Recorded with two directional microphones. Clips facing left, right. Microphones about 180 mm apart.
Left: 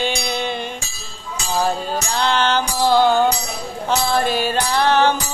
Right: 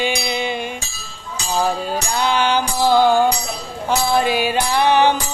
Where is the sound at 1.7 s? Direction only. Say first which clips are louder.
Right 1 dB; 10° right (ahead or behind).